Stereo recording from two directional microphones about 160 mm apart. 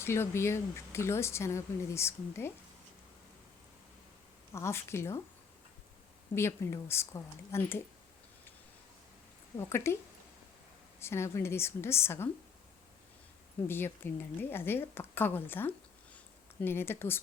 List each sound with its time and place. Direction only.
0.0 s speech: 15° left (ahead or behind)
4.5 s speech: 15° left (ahead or behind)
6.3 s speech: 15° left (ahead or behind)
9.6 s speech: 15° left (ahead or behind)
11.0 s speech: 15° left (ahead or behind)
13.7 s speech: 15° left (ahead or behind)
16.1 s a sound: 15° left (ahead or behind)